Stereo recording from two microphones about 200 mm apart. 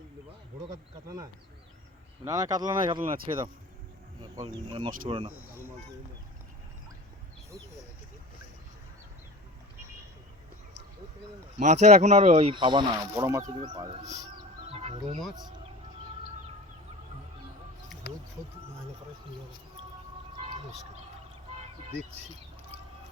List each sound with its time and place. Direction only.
0.7 s speech: 15° right (ahead or behind)
11.6 s speech: 35° right (ahead or behind); by 13.8 s 20° right (ahead or behind)
14.0 s speech: 35° right (ahead or behind)
14.7 s music: 30° right (ahead or behind)
18.0 s speech: 55° left (ahead or behind)